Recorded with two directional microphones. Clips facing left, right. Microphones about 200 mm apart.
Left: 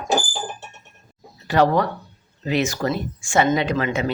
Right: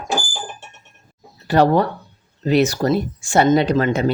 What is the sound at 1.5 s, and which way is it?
Speech, 30° right (ahead or behind).